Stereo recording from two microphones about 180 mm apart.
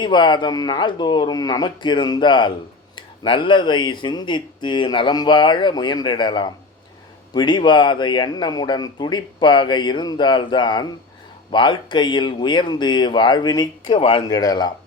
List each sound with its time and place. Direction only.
0.0 s speech: 25° left (ahead or behind)